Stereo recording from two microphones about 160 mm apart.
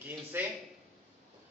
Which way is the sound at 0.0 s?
10° right (ahead or behind).